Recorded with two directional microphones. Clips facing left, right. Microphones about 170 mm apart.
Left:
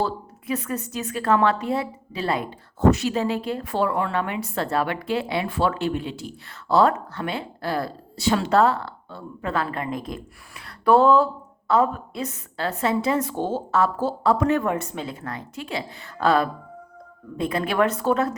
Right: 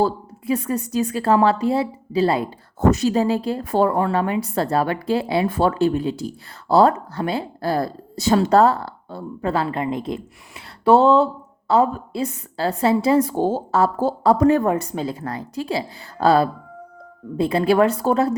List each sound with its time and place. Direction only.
0.0 s a woman's voice: 35° right (ahead or behind)